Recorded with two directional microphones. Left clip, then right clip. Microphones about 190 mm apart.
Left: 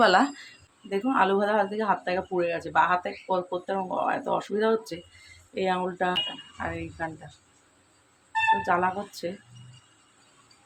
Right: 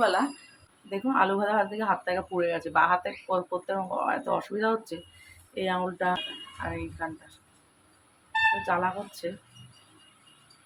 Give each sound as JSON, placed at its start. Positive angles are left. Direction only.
{"t": 0.0, "sound": "speech", "side_deg": 60}
{"t": 0.9, "sound": "speech", "side_deg": 15}
{"t": 8.6, "sound": "speech", "side_deg": 20}